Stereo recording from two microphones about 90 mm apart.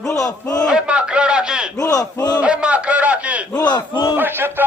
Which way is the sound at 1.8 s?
45° left (ahead or behind).